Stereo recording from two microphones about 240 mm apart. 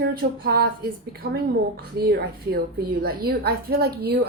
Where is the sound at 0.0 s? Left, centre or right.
Right.